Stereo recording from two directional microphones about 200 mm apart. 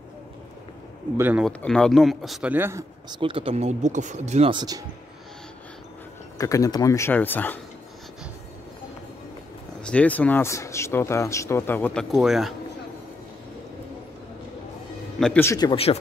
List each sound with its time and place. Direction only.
1.1 s speech: 10° right (ahead or behind)
1.4 s speech: 5° left (ahead or behind); by 3.2 s 10° right (ahead or behind)
3.2 s speech: 25° right (ahead or behind)
6.3 s speech: 15° left (ahead or behind)
9.8 s speech: 5° left (ahead or behind)
15.1 s speech: 5° left (ahead or behind); by 16.0 s 30° left (ahead or behind)